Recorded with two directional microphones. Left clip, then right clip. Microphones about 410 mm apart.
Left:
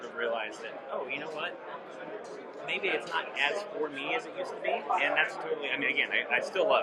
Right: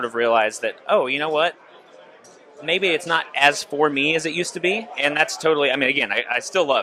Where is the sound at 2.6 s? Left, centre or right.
Right.